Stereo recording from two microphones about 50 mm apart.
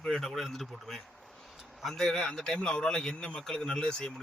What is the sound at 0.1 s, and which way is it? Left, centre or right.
Speech, centre.